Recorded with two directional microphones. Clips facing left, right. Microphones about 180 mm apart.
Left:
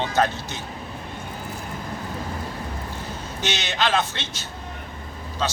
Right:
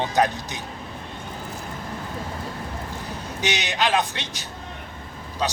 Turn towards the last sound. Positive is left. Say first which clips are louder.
# even
turn(degrees=-15)  # may be behind; listen again after turning